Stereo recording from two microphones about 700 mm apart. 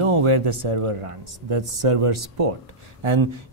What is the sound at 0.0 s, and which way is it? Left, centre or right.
Speech, right.